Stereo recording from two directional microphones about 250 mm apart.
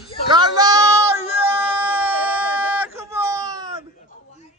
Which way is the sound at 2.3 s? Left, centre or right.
Centre.